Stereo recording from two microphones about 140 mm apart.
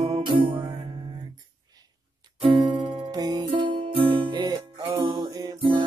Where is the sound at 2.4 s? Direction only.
40° right (ahead or behind).